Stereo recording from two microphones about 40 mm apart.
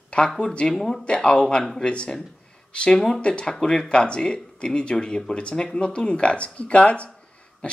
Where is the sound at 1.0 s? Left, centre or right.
Left.